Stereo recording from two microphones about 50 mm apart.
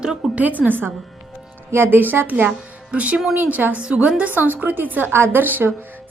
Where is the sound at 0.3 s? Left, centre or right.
Right.